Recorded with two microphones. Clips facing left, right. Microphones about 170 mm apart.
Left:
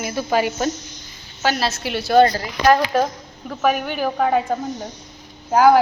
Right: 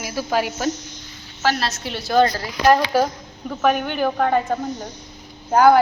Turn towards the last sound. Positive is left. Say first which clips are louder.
# even
turn(degrees=5)  # may be behind; listen again after turning